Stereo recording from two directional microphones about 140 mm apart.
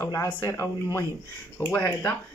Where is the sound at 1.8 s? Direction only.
20° left (ahead or behind).